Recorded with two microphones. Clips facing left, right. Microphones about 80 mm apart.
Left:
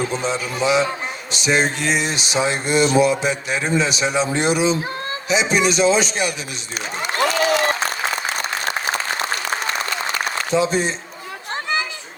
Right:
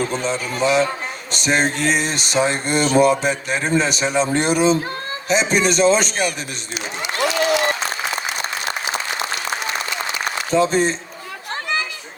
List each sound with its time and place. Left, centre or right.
0.3 s a sound: right
7.0 s applause: left
10.5 s a man's voice: right